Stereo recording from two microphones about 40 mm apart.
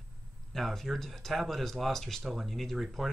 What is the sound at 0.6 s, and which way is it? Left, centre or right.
Speech, centre.